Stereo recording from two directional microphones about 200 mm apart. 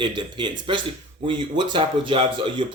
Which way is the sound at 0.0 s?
20° right (ahead or behind).